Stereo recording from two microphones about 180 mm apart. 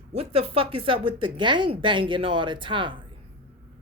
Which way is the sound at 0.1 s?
35° right (ahead or behind).